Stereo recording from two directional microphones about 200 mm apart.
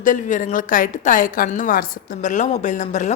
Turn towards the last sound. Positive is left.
turn(degrees=40)  # may be behind; listen again after turning